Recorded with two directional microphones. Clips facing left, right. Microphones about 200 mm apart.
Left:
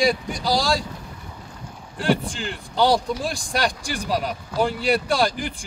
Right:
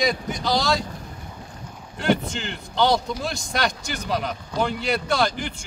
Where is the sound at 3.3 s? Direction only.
35° left (ahead or behind).